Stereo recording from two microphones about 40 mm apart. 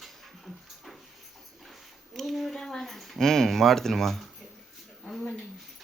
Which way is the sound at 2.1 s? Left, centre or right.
Centre.